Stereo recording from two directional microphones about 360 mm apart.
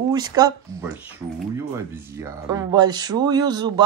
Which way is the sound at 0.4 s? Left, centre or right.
Centre.